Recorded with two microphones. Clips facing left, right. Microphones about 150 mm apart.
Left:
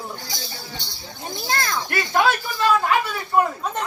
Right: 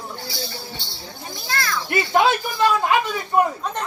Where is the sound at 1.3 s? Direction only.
20° left (ahead or behind).